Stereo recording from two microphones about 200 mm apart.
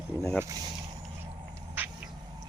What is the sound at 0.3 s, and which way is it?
Speech, 15° right (ahead or behind).